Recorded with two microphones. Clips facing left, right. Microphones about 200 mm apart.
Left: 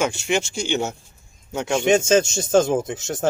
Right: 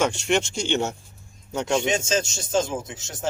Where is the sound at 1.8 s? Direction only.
50° left (ahead or behind).